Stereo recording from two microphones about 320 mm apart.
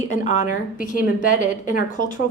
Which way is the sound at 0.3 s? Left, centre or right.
Left.